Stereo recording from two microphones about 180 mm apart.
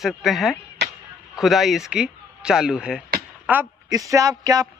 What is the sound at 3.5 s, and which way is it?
Speech, 15° right (ahead or behind).